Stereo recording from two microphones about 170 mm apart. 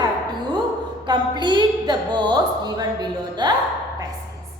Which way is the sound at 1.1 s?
25° right (ahead or behind).